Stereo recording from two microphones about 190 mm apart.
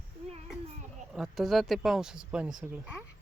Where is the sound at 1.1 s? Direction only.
Centre (ahead or behind).